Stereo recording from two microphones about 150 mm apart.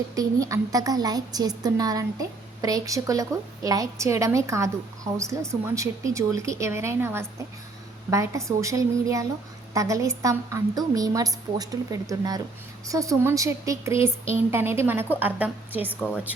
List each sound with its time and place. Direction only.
0.2 s a woman's voice: 20° right (ahead or behind); by 16.3 s 5° right (ahead or behind)